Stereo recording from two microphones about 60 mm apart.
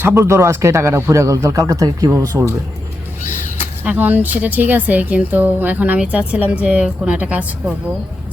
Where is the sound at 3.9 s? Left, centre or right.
Right.